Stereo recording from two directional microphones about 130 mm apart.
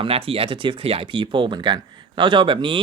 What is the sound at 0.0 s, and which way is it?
Speech, 45° right (ahead or behind).